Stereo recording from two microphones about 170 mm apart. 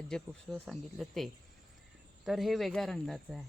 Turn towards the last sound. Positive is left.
turn(degrees=0)  # may be behind; listen again after turning